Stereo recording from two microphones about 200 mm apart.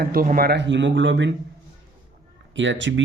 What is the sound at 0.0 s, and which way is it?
Speech, 45° right (ahead or behind).